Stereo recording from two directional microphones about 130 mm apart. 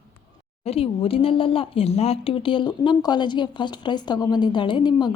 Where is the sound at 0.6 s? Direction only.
50° left (ahead or behind); by 5.1 s 35° left (ahead or behind).